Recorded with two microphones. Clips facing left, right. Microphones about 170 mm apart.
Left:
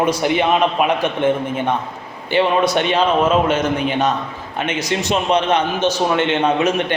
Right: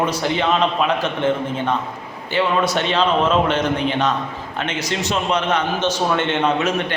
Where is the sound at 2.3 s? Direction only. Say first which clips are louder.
Left 3 dB; 20° left (ahead or behind).